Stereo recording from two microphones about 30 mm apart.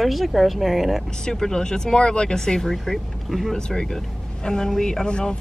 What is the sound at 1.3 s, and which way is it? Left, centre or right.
Speech, centre.